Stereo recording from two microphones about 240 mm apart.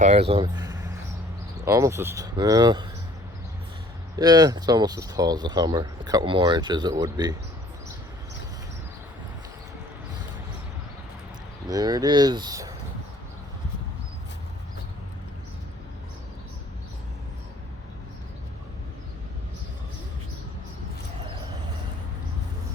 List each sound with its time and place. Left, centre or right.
0.0 s speech: right
4.2 s speech: centre
11.7 s speech: centre